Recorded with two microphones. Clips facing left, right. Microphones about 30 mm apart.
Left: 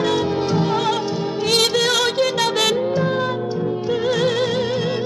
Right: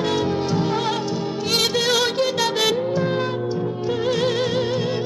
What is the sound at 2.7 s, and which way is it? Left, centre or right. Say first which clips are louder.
Music: left 2 dB; centre.